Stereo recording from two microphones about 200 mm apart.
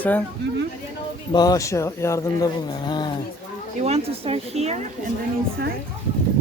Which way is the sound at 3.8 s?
30° right (ahead or behind).